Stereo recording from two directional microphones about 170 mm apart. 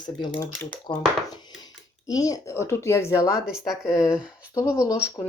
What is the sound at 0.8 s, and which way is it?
Speech, 25° left (ahead or behind).